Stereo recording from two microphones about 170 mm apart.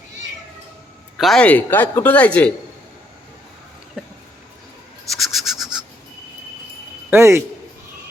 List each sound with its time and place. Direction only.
1.2 s speech: 5° left (ahead or behind)
5.1 s bird: centre (ahead or behind)
7.1 s a man's voice: 15° right (ahead or behind)